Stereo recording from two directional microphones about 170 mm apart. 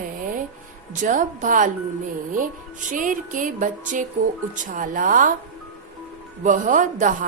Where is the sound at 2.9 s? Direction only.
50° right (ahead or behind).